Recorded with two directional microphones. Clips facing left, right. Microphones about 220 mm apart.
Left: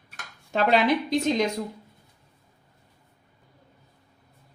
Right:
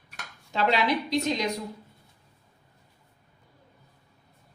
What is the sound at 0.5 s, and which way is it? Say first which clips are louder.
Speech: left 4 dB; 50° left (ahead or behind).